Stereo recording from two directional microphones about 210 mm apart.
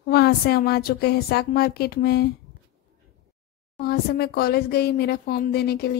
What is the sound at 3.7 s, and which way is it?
Speech, 50° left (ahead or behind).